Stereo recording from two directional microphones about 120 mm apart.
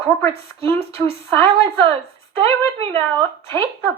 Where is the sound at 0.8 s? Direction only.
55° right (ahead or behind).